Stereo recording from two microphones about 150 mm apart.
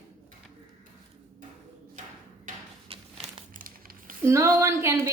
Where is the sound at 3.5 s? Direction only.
70° right (ahead or behind).